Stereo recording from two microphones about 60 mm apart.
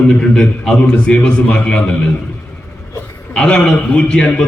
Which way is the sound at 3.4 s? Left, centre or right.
Left.